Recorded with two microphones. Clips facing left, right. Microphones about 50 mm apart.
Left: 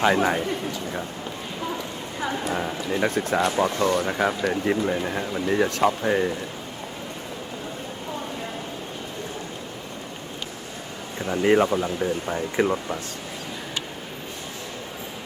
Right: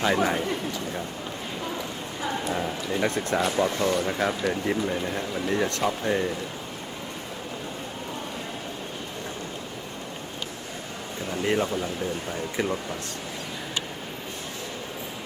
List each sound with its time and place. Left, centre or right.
0.1 s speech: centre
2.5 s speech: centre
11.3 s speech: left